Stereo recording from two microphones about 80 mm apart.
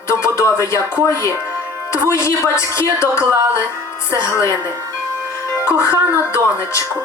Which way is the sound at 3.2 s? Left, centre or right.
Right.